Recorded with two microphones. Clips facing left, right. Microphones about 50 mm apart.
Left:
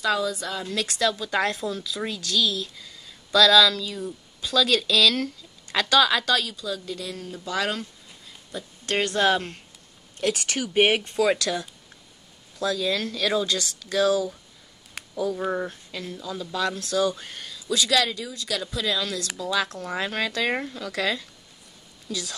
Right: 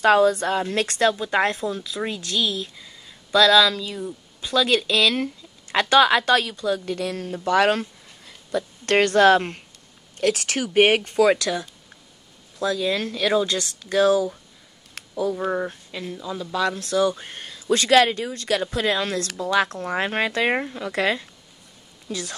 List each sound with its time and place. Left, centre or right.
0.0 s a woman's voice: right
1.1 s speech: right
3.6 s a woman's voice: centre; by 14.3 s right
15.0 s a sound: centre
15.3 s speech: centre
15.7 s speech: right